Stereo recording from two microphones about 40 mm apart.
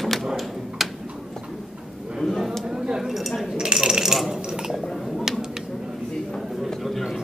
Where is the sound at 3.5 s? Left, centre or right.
Centre.